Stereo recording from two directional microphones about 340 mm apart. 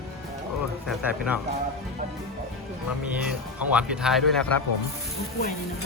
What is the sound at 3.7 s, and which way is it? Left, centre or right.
Speech, centre.